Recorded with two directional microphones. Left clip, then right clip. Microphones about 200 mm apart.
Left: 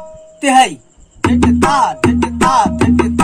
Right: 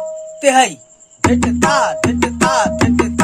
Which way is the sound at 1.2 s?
20° right (ahead or behind).